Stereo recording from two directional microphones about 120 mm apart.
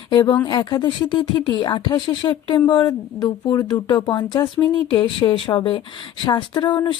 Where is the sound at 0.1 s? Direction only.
35° left (ahead or behind).